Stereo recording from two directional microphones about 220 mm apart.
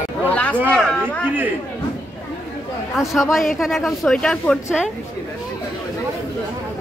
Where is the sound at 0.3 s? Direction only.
5° left (ahead or behind).